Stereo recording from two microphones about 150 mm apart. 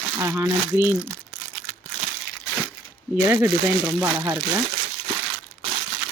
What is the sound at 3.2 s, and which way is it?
Speech, 15° right (ahead or behind).